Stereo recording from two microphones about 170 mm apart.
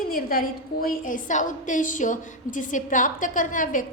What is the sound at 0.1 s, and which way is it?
A woman's voice, 55° left (ahead or behind).